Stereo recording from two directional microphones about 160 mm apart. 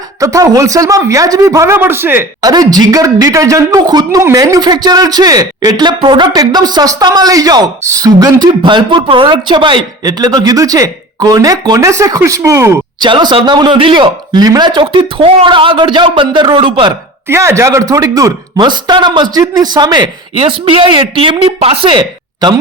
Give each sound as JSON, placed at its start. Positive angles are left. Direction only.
{"t": 0.2, "sound": "a woman's voice", "side_deg": -20}
{"t": 13.0, "sound": "a woman's voice", "side_deg": -30}
{"t": 17.2, "sound": "a woman's voice", "side_deg": -15}